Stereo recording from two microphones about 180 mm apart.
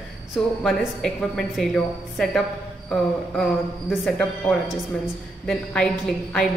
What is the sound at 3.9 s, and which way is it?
A woman's voice, centre (ahead or behind).